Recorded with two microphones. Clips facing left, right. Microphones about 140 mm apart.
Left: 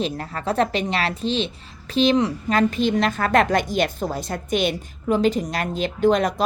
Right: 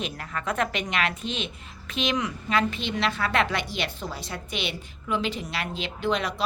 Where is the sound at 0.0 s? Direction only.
35° left (ahead or behind).